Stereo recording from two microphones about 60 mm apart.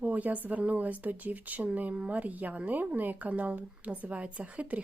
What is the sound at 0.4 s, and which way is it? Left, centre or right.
Speech, right.